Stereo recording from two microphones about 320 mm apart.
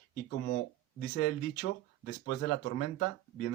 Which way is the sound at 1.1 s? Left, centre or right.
Left.